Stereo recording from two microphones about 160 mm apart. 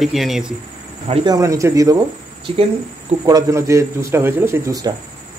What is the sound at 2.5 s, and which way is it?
Speech, 35° right (ahead or behind).